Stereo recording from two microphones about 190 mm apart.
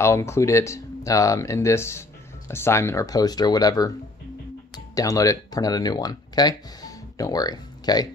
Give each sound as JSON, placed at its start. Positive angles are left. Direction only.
{"t": 0.0, "sound": "speech", "side_deg": 15}